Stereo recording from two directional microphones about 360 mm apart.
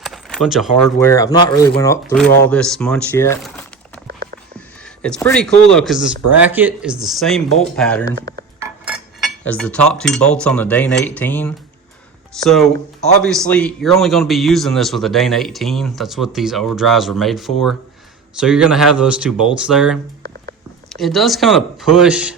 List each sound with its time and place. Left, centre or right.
0.0 s speech: centre
4.0 s a sound: right
5.0 s a man's voice: centre
8.5 s cutlery: centre
12.3 s a man's voice: centre